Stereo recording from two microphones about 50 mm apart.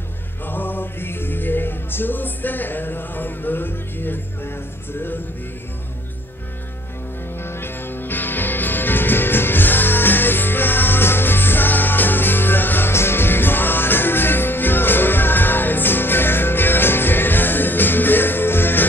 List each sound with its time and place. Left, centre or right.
0.5 s music: left
7.4 s music: left